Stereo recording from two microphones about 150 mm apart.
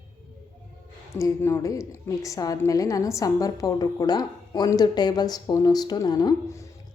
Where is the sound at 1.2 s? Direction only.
20° left (ahead or behind).